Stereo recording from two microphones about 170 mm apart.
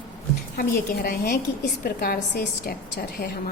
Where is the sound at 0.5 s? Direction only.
60° left (ahead or behind).